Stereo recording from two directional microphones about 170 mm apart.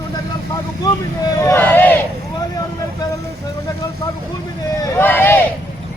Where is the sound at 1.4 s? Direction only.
15° left (ahead or behind).